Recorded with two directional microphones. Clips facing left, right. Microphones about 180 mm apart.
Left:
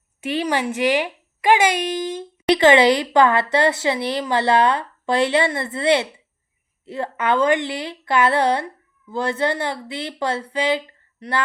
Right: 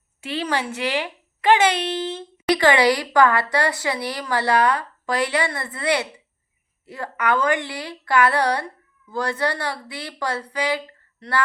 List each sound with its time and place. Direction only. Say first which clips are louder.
0.2 s speech: left 3 dB; 15° left (ahead or behind)